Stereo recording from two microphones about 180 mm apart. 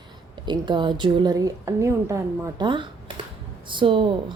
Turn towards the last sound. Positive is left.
turn(degrees=-30)  # may be behind; listen again after turning